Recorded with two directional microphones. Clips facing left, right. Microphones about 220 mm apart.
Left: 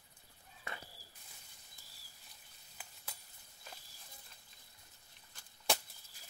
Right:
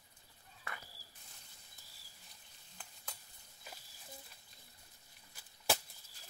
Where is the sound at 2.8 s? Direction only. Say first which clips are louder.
Left 1 dB; 5° left (ahead or behind).